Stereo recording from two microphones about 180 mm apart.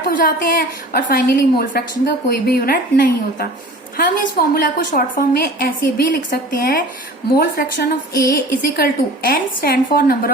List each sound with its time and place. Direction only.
0.0 s a woman's voice: 50° left (ahead or behind)